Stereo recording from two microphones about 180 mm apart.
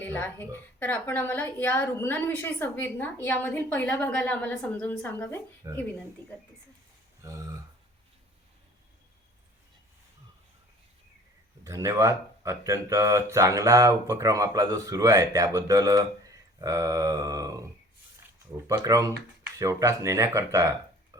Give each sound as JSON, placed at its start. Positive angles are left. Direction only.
{"t": 0.0, "sound": "a woman's voice", "side_deg": 10}
{"t": 5.6, "sound": "speech", "side_deg": -20}
{"t": 7.2, "sound": "a sound", "side_deg": -20}
{"t": 11.6, "sound": "speech", "side_deg": -20}
{"t": 18.8, "sound": "speech", "side_deg": -20}